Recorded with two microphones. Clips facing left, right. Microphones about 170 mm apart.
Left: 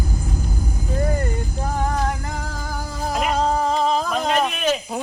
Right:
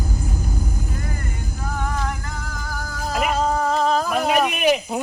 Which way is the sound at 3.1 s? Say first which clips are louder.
Even; 5° right (ahead or behind).